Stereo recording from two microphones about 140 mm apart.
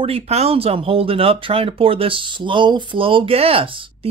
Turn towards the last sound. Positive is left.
turn(degrees=-40)  # may be behind; listen again after turning